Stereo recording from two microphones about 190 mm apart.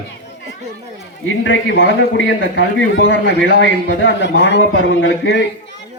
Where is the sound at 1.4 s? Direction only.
75° left (ahead or behind).